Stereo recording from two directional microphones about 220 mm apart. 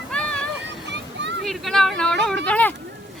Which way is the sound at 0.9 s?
55° right (ahead or behind).